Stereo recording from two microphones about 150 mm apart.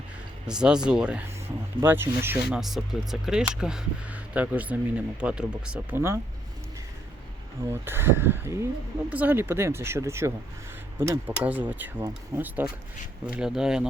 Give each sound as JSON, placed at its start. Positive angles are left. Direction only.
{"t": 0.4, "sound": "speech", "side_deg": -5}
{"t": 2.6, "sound": "speech", "side_deg": 0}
{"t": 7.7, "sound": "speech", "side_deg": -15}